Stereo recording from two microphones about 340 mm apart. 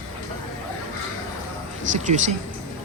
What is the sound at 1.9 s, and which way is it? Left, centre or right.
Speech, right.